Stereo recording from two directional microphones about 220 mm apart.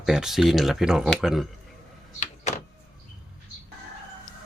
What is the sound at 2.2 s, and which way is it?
Power windows, 30° left (ahead or behind).